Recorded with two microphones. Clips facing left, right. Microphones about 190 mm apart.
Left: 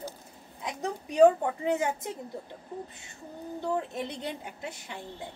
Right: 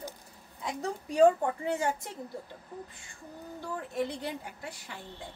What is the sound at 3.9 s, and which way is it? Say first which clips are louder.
A woman's voice: right 2 dB; 20° left (ahead or behind).